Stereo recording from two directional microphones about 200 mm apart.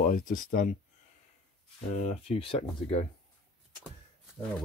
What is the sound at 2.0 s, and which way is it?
Speech, 35° left (ahead or behind).